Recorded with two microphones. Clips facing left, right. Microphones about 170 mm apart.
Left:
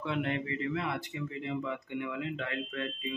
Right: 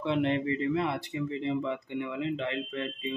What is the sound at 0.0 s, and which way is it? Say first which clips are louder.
A man's voice: right 6 dB; 25° right (ahead or behind).